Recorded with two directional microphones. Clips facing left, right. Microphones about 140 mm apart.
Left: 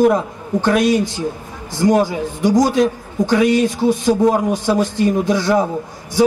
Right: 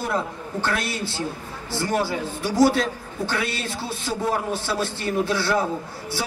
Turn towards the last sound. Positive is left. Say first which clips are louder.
# left 7 dB
turn(degrees=15)  # may be behind; listen again after turning